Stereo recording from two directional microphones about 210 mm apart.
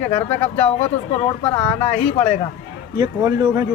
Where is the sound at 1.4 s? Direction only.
25° left (ahead or behind).